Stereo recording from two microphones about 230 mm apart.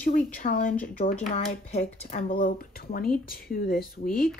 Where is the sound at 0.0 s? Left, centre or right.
Left.